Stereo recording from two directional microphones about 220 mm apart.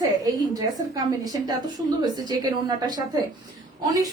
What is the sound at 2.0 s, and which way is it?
A woman's voice, 15° right (ahead or behind).